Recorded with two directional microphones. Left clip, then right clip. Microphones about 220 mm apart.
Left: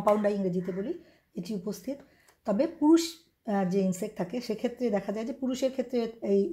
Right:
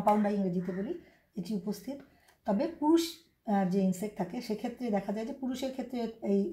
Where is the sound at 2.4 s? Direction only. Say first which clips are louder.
Left 4 dB; 40° left (ahead or behind).